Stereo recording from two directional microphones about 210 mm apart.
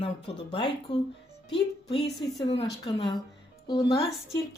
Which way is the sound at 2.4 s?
25° left (ahead or behind).